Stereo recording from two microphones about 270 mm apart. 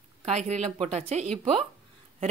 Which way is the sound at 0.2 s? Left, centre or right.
Right.